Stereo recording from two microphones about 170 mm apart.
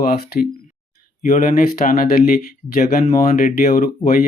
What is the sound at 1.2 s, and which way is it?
Speech, 50° left (ahead or behind).